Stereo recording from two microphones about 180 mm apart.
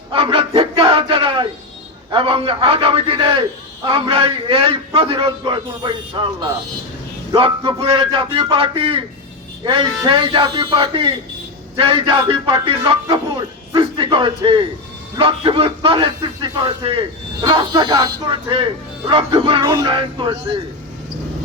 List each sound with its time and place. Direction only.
0.1 s a sound: 30° right (ahead or behind)
2.0 s a man's voice: 30° right (ahead or behind)
10.1 s a man's voice: 25° right (ahead or behind)